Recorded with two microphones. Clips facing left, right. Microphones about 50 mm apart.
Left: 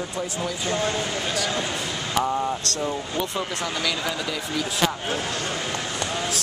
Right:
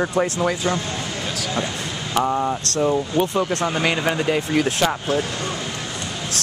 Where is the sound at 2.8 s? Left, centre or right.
Right.